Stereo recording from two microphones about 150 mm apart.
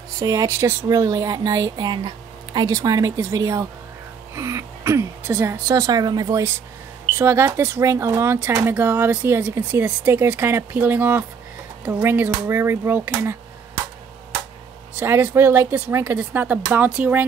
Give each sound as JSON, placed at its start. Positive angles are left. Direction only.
{"t": 0.2, "sound": "speech", "side_deg": -25}
{"t": 15.0, "sound": "speech", "side_deg": -15}